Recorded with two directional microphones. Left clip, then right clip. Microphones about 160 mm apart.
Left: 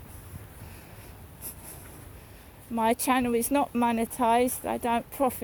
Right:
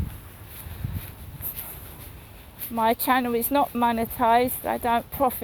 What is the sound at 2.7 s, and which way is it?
Speech, 65° left (ahead or behind).